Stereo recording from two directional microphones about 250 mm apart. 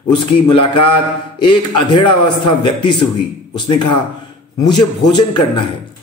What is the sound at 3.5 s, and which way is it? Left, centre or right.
Speech, centre.